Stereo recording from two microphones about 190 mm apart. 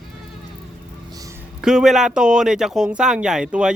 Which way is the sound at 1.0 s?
20° right (ahead or behind).